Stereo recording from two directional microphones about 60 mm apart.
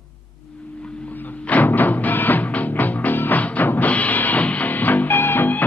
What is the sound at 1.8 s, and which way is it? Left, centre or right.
Music, left.